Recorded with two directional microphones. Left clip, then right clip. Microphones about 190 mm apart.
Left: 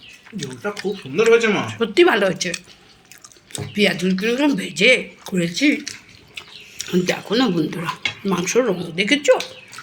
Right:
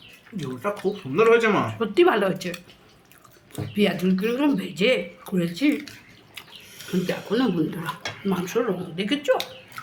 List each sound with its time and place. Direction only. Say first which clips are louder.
0.3 s speech: left 1 dB; centre (ahead or behind)
6.7 s speech: left 7 dB; 30° left (ahead or behind)